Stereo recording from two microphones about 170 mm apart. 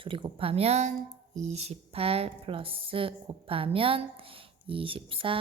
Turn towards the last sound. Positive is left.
turn(degrees=-30)  # may be behind; listen again after turning